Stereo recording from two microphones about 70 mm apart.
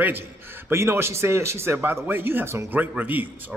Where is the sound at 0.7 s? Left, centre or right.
Right.